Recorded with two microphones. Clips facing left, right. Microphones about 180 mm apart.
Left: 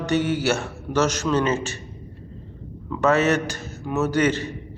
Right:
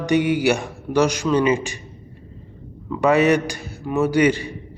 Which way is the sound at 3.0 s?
15° right (ahead or behind).